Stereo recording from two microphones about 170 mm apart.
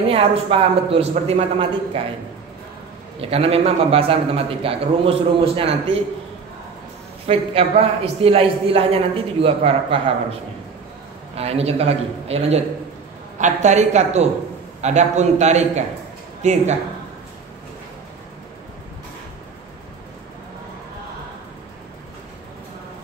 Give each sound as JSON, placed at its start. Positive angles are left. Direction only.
{"t": 0.1, "sound": "a man's voice", "side_deg": -35}
{"t": 3.2, "sound": "a man's voice", "side_deg": -35}
{"t": 7.2, "sound": "a man's voice", "side_deg": -35}
{"t": 11.3, "sound": "a man's voice", "side_deg": -35}